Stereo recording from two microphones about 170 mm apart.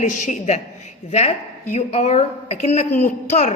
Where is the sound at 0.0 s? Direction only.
45° left (ahead or behind).